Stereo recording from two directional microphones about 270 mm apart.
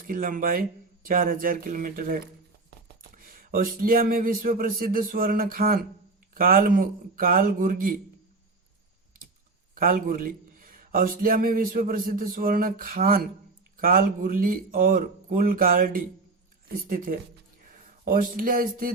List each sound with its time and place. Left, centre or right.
0.0 s a man's voice: right
9.7 s a man's voice: right